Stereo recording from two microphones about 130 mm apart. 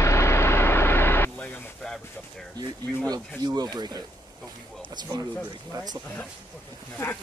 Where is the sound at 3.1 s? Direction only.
30° right (ahead or behind).